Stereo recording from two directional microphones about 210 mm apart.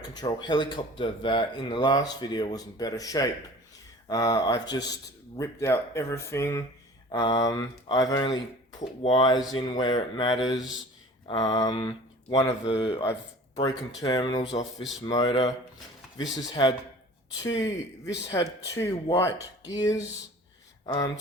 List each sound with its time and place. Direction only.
0.1 s speech: 20° left (ahead or behind)
10.5 s a man's voice: centre (ahead or behind)
11.3 s speech: 30° left (ahead or behind)
11.6 s speech: 20° left (ahead or behind)
16.6 s speech: 20° left (ahead or behind)